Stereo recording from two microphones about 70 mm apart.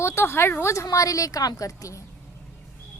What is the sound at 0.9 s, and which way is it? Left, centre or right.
A woman's voice, left.